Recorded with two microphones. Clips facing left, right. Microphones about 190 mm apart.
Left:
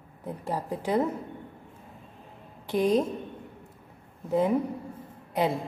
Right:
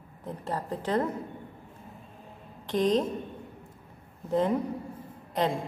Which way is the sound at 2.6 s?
10° left (ahead or behind).